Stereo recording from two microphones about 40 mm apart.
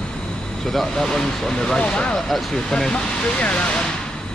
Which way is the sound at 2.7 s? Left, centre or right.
Centre.